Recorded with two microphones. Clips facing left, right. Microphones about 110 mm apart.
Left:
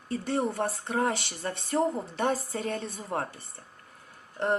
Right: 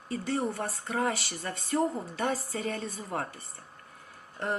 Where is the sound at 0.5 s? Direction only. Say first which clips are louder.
Left 3 dB; 30° left (ahead or behind).